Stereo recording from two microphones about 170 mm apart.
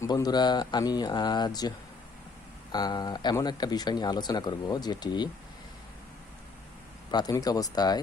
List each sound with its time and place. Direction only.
0.0 s speech: 25° left (ahead or behind)
2.7 s speech: 25° left (ahead or behind)
7.1 s speech: 25° left (ahead or behind)